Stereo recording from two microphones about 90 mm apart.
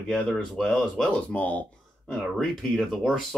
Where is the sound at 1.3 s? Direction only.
15° left (ahead or behind).